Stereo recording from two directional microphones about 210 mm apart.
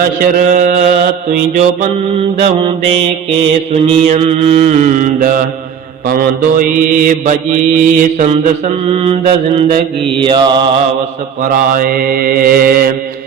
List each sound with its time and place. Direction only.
0.0 s mantra: 40° right (ahead or behind)
2.4 s mantra: 30° right (ahead or behind)
11.4 s mantra: 40° right (ahead or behind)